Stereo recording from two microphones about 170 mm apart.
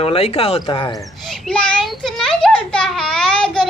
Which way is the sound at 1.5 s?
5° left (ahead or behind).